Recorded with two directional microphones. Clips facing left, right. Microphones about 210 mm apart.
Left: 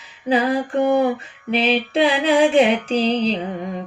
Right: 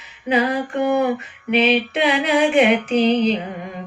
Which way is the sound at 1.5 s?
30° left (ahead or behind).